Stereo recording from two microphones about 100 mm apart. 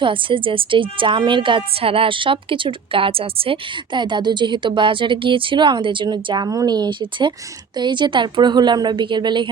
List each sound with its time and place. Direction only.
0.0 s a woman's voice: 60° right (ahead or behind)